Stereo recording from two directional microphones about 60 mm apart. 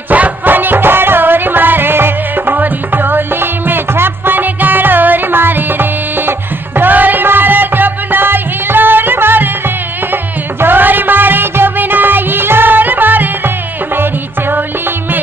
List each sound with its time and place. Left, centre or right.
0.1 s music: right
10.6 s music: right